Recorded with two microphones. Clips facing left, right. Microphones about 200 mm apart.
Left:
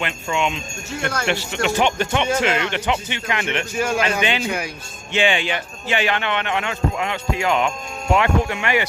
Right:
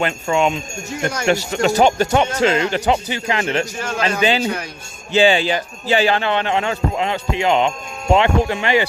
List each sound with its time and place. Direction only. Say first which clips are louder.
0.0 s a man's voice: right 5 dB; 40° right (ahead or behind)
0.9 s speech: right 2 dB; 15° right (ahead or behind)
1.3 s a man's voice: right 7 dB; 40° right (ahead or behind)
3.8 s speech: even; 10° left (ahead or behind)
5.1 s a man's voice: right 6 dB; 35° right (ahead or behind)